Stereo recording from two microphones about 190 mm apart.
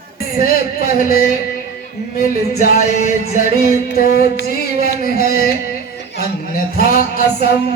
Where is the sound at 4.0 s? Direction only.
50° left (ahead or behind).